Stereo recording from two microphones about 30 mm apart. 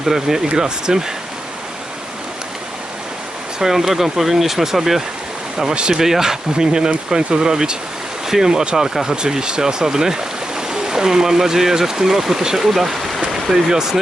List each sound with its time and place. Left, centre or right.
0.0 s speech: centre
3.6 s speech: centre
5.7 s speech: right
6.0 s speech: centre